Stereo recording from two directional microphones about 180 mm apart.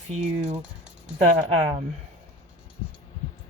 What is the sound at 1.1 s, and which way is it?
Speech, 35° right (ahead or behind).